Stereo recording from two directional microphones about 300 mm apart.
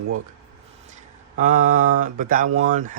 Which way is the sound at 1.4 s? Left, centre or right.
Right.